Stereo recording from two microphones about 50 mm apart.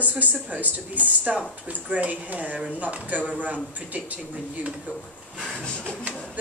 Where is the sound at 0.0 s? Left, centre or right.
Right.